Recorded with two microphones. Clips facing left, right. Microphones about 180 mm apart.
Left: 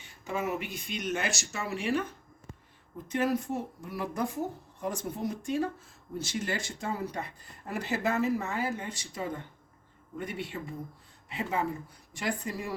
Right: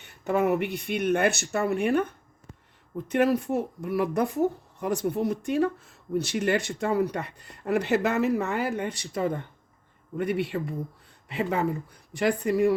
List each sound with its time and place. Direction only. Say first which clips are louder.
0.0 s speech: right 9 dB; 60° right (ahead or behind)